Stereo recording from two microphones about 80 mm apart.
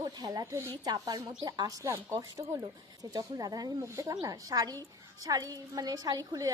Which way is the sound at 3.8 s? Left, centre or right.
Right.